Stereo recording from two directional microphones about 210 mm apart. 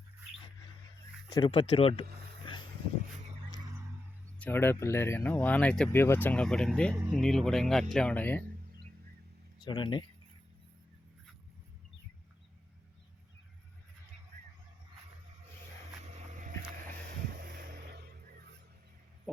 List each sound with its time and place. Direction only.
1.3 s speech: 20° left (ahead or behind)
2.5 s a sound: 25° left (ahead or behind)
4.4 s speech: 10° left (ahead or behind)
6.9 s speech: 10° right (ahead or behind)
7.2 s speech: centre (ahead or behind)
9.6 s speech: 20° left (ahead or behind)
17.4 s a sound: 45° right (ahead or behind)